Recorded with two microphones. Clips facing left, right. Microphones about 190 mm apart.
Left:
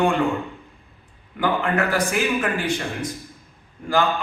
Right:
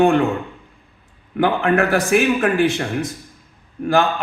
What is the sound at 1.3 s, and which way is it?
A man's voice, 70° right (ahead or behind).